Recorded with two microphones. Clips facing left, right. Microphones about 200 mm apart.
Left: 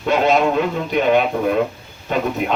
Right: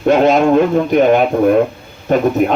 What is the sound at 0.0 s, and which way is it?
A man's voice, 50° right (ahead or behind).